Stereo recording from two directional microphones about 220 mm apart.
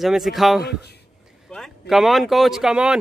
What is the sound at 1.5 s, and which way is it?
Speech, centre (ahead or behind).